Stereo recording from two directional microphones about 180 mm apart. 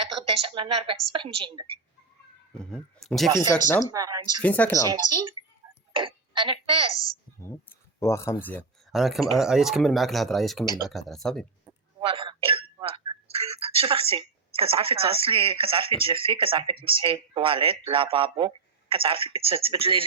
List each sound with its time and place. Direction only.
0.0 s a woman's voice: 30° right (ahead or behind)
2.6 s speech: 5° left (ahead or behind)
3.2 s a woman's voice: 25° right (ahead or behind)
4.4 s speech: 10° left (ahead or behind)
4.9 s a woman's voice: 25° right (ahead or behind)
5.9 s a sound: 30° right (ahead or behind)
6.9 s a woman's voice: 20° left (ahead or behind)
8.9 s speech: centre (ahead or behind)
11.9 s speech: 30° right (ahead or behind)